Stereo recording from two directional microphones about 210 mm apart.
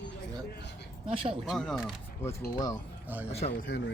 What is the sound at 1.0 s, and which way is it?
Speech, 25° right (ahead or behind).